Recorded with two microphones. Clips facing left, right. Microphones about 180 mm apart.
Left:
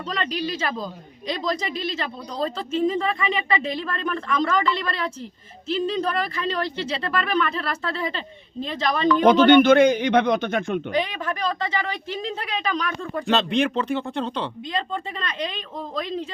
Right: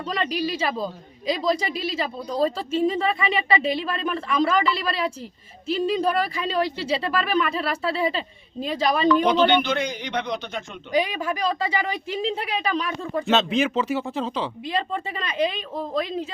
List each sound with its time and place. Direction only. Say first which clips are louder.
0.1 s a woman's voice: right 2 dB; 5° right (ahead or behind)
9.0 s a man's voice: left 5 dB; 50° left (ahead or behind)
10.9 s a woman's voice: right 2 dB; 10° right (ahead or behind)